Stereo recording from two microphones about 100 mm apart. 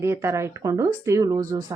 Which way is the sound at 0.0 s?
25° right (ahead or behind).